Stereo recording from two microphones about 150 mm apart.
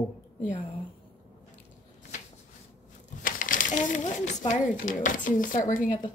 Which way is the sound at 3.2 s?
65° left (ahead or behind).